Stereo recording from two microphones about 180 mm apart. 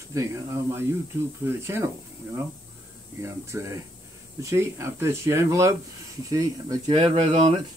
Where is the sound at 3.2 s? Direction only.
15° right (ahead or behind).